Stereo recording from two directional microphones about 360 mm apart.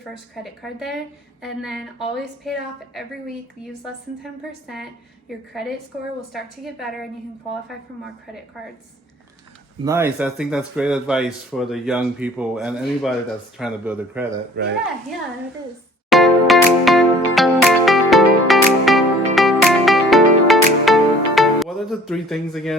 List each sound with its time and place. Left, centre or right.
0.4 s speech: centre
6.3 s speech: centre
9.8 s speech: centre
14.6 s speech: right
16.0 s music: centre